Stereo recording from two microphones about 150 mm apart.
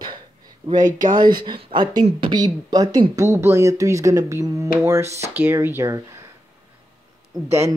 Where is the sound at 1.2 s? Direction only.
30° right (ahead or behind).